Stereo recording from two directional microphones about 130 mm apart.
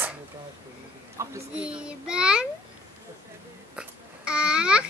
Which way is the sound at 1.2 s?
25° right (ahead or behind).